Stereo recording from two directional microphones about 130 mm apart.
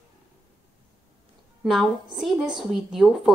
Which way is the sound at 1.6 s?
Centre (ahead or behind).